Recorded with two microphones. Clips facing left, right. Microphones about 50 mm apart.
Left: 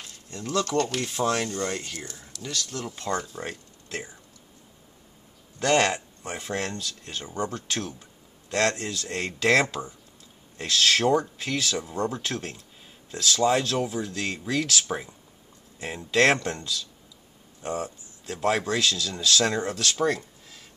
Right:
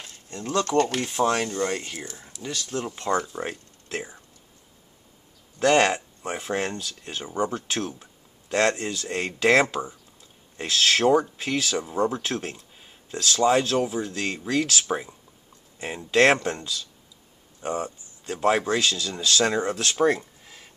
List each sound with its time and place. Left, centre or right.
0.5 s speech: right
1.0 s speech: centre
5.6 s speech: centre